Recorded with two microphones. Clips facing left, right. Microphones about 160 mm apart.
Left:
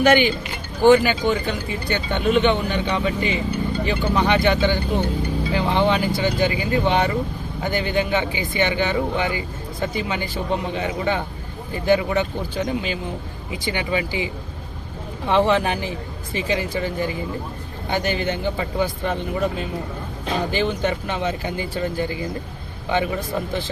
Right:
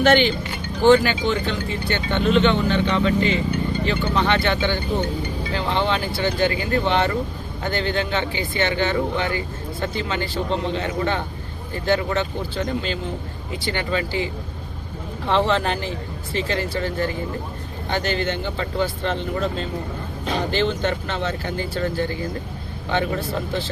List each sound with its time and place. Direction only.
0.0 s speech: 10° left (ahead or behind)
15.3 s speech: 15° left (ahead or behind)